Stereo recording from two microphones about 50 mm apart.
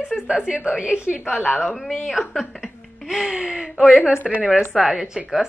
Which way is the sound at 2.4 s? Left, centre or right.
Centre.